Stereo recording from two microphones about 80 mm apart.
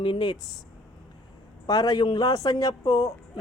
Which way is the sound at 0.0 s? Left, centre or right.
Left.